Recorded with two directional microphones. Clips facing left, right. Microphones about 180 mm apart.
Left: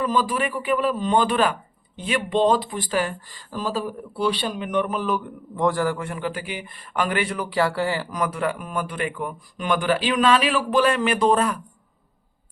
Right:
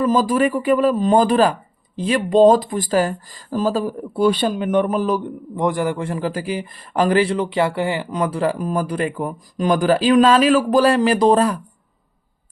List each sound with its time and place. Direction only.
0.0 s speech: 45° right (ahead or behind)
5.5 s a man's voice: 20° right (ahead or behind)
6.1 s speech: 35° right (ahead or behind)